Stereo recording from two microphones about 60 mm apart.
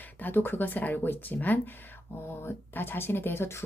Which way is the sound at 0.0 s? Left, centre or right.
Left.